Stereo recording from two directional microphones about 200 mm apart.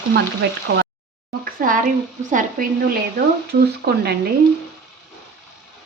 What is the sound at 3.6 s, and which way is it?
Frying, 55° right (ahead or behind).